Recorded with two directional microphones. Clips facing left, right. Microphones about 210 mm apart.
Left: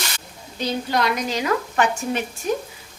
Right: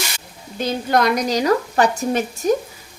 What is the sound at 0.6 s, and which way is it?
A woman's voice, 50° right (ahead or behind).